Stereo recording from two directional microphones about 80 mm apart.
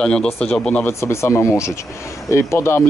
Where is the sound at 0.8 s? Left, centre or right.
Left.